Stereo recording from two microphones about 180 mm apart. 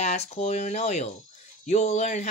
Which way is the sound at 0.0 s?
35° left (ahead or behind).